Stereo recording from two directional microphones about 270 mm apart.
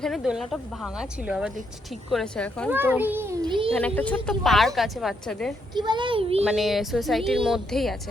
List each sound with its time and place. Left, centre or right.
0.0 s a woman's voice: centre
2.7 s a child's voice: centre
3.8 s a woman's voice: centre
5.7 s a child's voice: centre
6.4 s a woman's voice: centre